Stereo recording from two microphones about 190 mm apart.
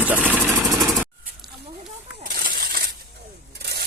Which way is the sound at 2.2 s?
45° right (ahead or behind).